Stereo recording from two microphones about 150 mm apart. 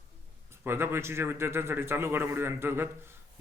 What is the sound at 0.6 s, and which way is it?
Speech, 15° right (ahead or behind).